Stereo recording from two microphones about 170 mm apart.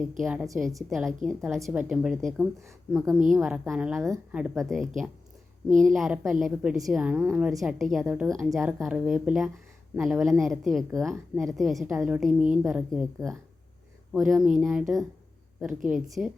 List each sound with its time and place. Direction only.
0.2 s a woman's voice: 5° right (ahead or behind)
2.6 s speech: 20° right (ahead or behind)
3.3 s a woman's voice: 5° right (ahead or behind)
5.6 s speech: 50° right (ahead or behind)
5.9 s a woman's voice: centre (ahead or behind)
8.3 s speech: 20° right (ahead or behind)
8.5 s a woman's voice: 5° right (ahead or behind)